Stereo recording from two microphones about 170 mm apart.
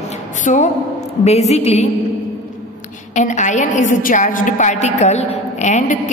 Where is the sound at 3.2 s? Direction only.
45° left (ahead or behind).